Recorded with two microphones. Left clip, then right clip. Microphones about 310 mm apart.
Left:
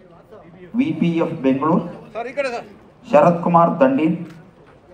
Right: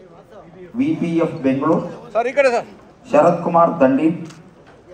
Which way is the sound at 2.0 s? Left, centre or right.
Centre.